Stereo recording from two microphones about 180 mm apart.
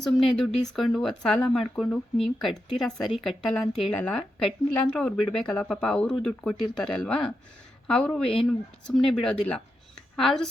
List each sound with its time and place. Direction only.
0.0 s speech: centre (ahead or behind)